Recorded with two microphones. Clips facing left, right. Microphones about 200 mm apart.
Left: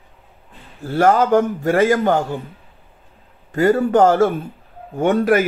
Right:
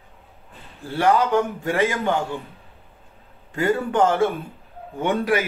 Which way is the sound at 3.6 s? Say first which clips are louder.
Left 6 dB; 40° left (ahead or behind).